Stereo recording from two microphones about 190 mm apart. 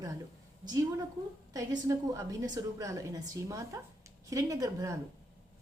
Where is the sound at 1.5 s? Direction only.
20° right (ahead or behind).